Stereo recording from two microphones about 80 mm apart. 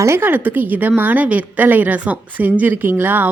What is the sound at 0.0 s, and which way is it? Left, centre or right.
A woman's voice, right.